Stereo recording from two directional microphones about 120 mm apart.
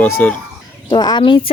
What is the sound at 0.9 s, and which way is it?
Speech, 40° left (ahead or behind).